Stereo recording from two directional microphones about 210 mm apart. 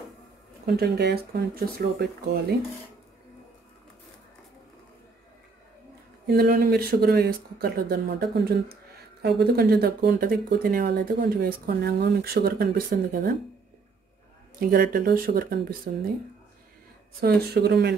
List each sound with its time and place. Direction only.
0.7 s speech: 50° right (ahead or behind)
6.2 s speech: 45° right (ahead or behind)
14.6 s speech: 45° right (ahead or behind)
17.2 s speech: 50° right (ahead or behind)